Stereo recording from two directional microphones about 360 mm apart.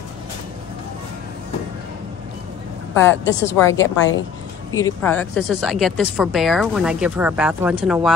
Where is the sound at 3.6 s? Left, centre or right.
Centre.